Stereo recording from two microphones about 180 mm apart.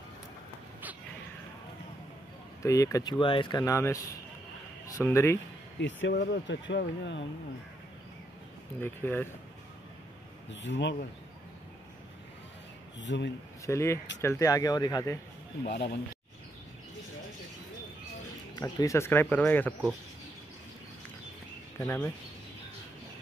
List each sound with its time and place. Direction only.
2.6 s speech: 20° left (ahead or behind)
5.8 s speech: 85° left
8.8 s speech: 10° left (ahead or behind)
10.5 s speech: 80° left
13.0 s speech: 90° left
13.7 s speech: 15° left (ahead or behind)
15.7 s speech: 65° left (ahead or behind)
18.6 s speech: 20° left (ahead or behind)
21.7 s speech: 15° left (ahead or behind)